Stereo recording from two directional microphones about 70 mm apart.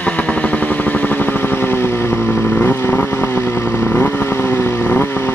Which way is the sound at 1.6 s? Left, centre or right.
Left.